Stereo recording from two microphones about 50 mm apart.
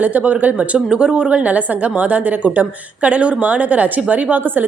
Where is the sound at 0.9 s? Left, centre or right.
Centre.